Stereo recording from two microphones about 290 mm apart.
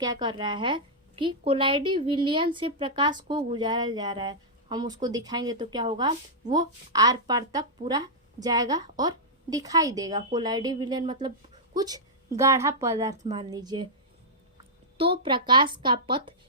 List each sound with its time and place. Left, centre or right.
0.0 s a woman's voice: centre
14.9 s a woman's voice: centre